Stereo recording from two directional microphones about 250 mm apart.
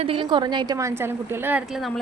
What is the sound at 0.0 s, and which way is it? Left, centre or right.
A woman's voice, right.